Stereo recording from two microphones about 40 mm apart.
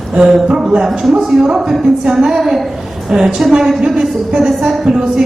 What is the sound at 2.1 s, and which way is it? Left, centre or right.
A woman's voice, centre.